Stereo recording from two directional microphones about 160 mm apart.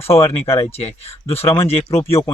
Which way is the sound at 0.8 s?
40° left (ahead or behind).